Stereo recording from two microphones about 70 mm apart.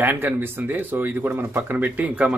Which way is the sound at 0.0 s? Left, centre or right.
Right.